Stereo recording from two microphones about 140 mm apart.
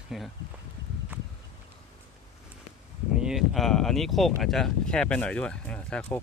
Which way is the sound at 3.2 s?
Centre (ahead or behind).